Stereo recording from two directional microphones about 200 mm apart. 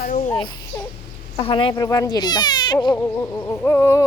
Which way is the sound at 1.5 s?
25° left (ahead or behind).